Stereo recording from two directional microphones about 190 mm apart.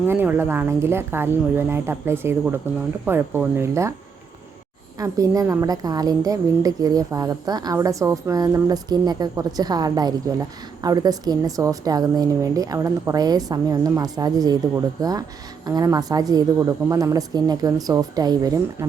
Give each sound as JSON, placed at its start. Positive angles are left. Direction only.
{"t": 0.0, "sound": "speech", "side_deg": -10}
{"t": 4.9, "sound": "a woman's voice", "side_deg": -20}